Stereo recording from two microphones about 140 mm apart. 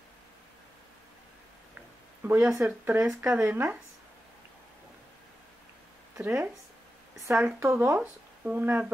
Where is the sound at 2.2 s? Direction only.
10° right (ahead or behind).